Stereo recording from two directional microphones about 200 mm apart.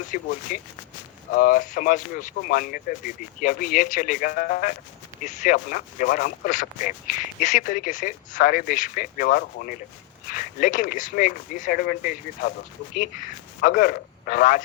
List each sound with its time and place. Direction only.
0.0 s speech: 40° left (ahead or behind)
13.7 s speech: 45° left (ahead or behind)